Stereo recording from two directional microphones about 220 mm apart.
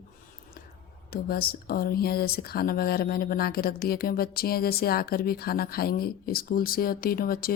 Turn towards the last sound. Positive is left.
turn(degrees=40)  # may be behind; listen again after turning